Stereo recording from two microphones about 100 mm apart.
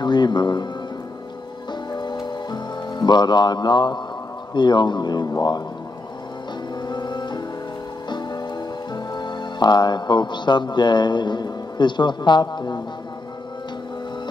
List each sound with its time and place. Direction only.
0.0 s speech: 45° left (ahead or behind)
1.7 s music: 50° left (ahead or behind)
4.6 s speech: 50° left (ahead or behind)
6.9 s music: 50° left (ahead or behind)
8.9 s speech: 50° left (ahead or behind)